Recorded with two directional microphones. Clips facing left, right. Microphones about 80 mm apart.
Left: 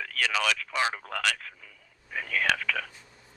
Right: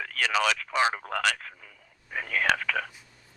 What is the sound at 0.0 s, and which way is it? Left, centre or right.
A man's voice, right.